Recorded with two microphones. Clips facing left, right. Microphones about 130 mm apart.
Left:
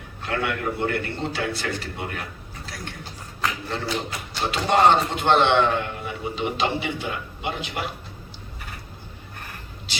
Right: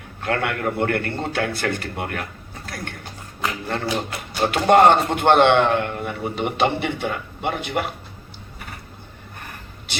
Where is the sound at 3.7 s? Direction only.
55° right (ahead or behind).